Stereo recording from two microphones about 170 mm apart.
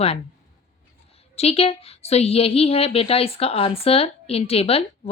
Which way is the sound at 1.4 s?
35° left (ahead or behind).